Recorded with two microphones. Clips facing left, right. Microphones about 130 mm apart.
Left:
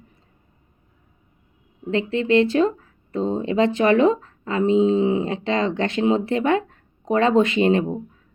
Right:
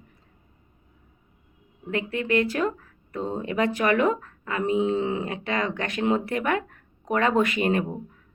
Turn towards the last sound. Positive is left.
turn(degrees=25)  # may be behind; listen again after turning